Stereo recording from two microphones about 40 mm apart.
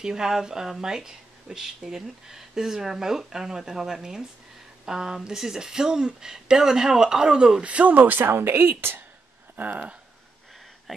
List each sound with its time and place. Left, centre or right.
0.0 s speech: centre
7.6 s speech: right
8.2 s speech: right
10.9 s speech: centre